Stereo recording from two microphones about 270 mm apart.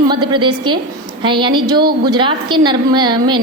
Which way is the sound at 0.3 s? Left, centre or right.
Centre.